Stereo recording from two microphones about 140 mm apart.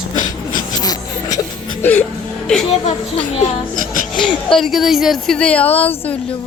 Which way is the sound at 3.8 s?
70° left (ahead or behind).